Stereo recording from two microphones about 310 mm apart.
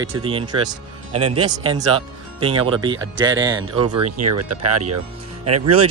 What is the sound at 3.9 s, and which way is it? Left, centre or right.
Speech, right.